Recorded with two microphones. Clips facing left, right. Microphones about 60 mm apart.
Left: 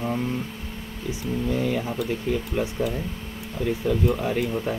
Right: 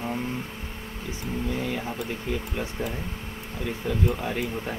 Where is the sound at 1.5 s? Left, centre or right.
Centre.